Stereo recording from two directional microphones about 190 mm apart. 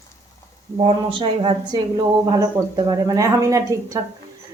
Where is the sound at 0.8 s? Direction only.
30° right (ahead or behind).